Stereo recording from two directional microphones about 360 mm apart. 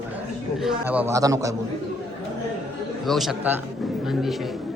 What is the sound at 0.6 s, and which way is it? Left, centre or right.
Speech, centre.